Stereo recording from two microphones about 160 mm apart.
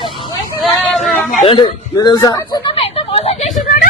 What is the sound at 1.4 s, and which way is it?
A man's voice, 35° left (ahead or behind).